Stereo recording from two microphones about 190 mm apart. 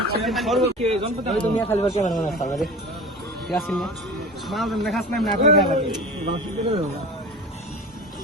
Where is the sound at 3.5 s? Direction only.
Centre (ahead or behind).